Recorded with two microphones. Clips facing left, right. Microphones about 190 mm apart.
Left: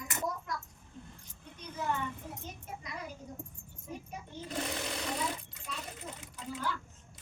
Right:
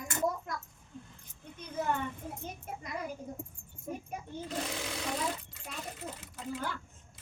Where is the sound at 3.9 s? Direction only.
50° right (ahead or behind).